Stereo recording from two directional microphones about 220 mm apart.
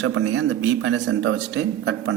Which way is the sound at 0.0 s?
60° right (ahead or behind).